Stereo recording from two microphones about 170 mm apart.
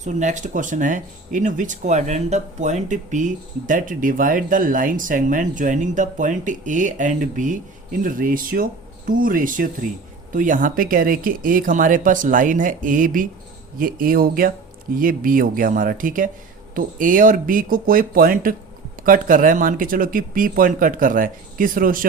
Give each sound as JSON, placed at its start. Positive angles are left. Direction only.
{"t": 0.0, "sound": "speech", "side_deg": -45}